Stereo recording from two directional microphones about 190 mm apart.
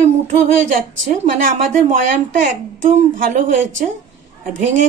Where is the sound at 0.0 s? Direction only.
40° right (ahead or behind).